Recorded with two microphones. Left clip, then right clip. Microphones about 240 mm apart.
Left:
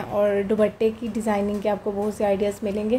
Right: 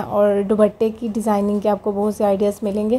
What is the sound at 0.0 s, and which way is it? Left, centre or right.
A woman's voice, right.